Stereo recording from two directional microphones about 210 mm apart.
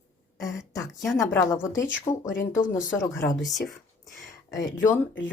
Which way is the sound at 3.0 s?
10° left (ahead or behind).